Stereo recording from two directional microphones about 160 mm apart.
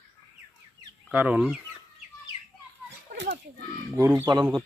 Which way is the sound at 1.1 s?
5° right (ahead or behind).